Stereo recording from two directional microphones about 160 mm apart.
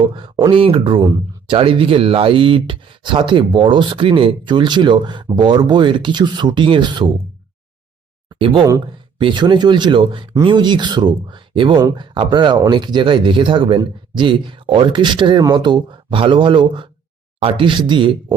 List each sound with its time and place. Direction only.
0.2 s speech: 25° right (ahead or behind)
9.1 s speech: 30° right (ahead or behind)